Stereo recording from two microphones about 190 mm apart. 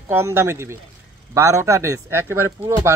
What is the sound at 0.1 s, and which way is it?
Speech, 15° right (ahead or behind).